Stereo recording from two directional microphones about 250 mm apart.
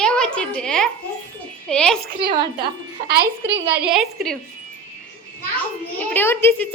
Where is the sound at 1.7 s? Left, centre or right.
Centre.